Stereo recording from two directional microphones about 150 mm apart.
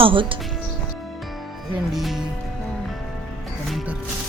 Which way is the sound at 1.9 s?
Centre (ahead or behind).